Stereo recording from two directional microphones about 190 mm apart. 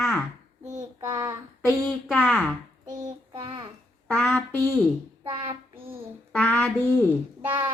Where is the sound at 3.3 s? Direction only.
25° right (ahead or behind).